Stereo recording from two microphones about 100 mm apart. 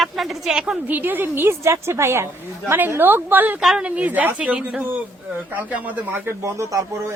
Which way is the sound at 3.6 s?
5° right (ahead or behind).